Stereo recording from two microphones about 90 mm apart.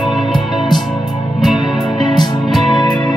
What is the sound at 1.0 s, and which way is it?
Music, 70° left (ahead or behind).